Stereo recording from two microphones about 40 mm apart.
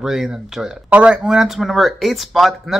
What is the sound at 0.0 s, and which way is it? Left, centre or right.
Speech, centre.